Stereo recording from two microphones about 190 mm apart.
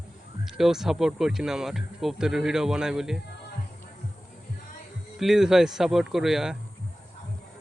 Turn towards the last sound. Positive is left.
turn(degrees=0)  # may be behind; listen again after turning